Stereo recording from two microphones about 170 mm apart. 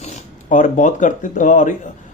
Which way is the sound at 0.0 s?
45° left (ahead or behind).